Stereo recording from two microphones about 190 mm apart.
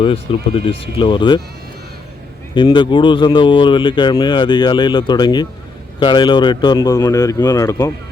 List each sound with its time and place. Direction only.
0.0 s speech: 30° left (ahead or behind)
2.6 s speech: 25° left (ahead or behind)